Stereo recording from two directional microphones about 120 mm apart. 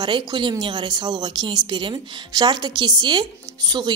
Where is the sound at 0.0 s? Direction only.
35° right (ahead or behind).